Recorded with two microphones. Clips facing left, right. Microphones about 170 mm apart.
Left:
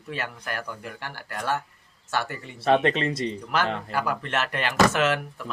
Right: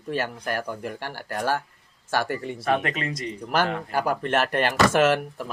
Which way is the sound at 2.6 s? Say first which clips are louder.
Left 5 dB; 25° left (ahead or behind).